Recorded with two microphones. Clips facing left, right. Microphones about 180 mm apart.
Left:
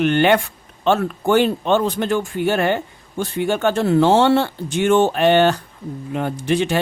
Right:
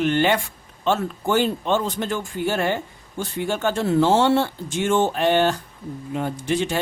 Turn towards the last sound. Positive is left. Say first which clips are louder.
# left 4 dB
turn(degrees=65)  # may be behind; listen again after turning